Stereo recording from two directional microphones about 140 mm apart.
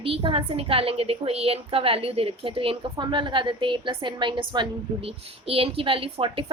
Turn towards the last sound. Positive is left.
turn(degrees=-40)  # may be behind; listen again after turning